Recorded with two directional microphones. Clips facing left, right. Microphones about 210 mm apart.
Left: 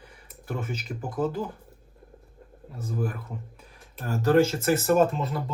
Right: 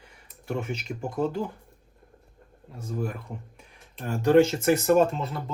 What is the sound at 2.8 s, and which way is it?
Speech, 5° left (ahead or behind).